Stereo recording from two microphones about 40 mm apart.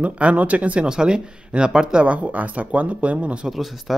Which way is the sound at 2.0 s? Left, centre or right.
Right.